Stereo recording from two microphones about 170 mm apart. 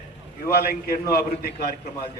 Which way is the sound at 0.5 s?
60° left (ahead or behind).